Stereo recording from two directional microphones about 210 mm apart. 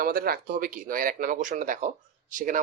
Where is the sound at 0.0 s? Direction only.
45° right (ahead or behind).